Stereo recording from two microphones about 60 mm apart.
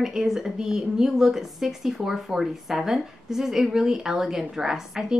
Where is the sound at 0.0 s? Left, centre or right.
Centre.